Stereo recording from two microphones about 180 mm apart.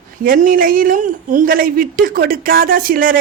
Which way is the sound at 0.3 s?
50° right (ahead or behind).